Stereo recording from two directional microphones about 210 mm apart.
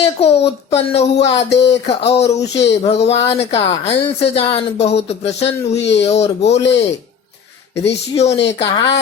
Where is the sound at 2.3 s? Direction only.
55° left (ahead or behind).